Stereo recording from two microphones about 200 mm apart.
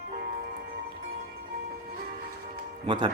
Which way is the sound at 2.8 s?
25° right (ahead or behind).